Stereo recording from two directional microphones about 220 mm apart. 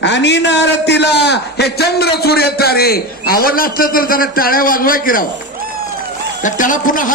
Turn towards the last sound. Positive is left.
turn(degrees=35)  # may be behind; listen again after turning